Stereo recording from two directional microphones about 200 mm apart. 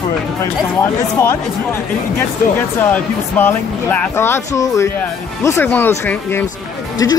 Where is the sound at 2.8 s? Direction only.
10° left (ahead or behind).